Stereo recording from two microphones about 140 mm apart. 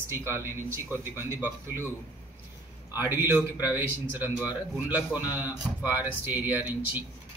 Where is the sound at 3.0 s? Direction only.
15° right (ahead or behind).